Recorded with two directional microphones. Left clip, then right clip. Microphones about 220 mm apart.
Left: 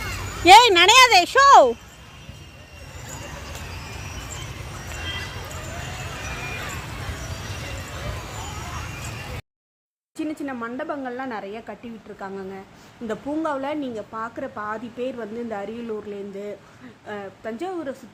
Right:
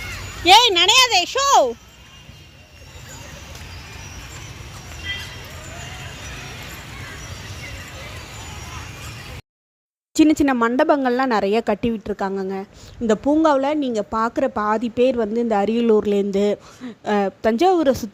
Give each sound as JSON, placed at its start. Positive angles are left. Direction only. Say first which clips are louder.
{"t": 0.4, "sound": "speech", "louder": "left 1 dB", "side_deg": 5}
{"t": 10.2, "sound": "a woman's voice", "louder": "right 14 dB", "side_deg": -45}